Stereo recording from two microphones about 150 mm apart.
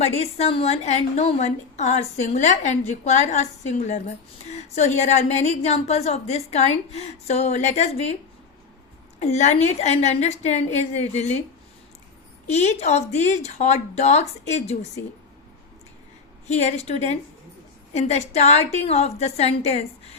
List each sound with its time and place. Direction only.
0.0 s a woman's voice: 45° left (ahead or behind)
9.2 s a woman's voice: 50° left (ahead or behind)
12.5 s a woman's voice: 50° left (ahead or behind)
16.5 s a woman's voice: 45° left (ahead or behind)